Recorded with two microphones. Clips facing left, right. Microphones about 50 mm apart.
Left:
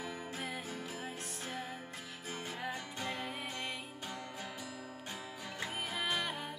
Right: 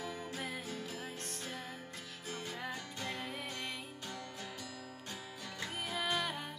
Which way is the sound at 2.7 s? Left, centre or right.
Centre.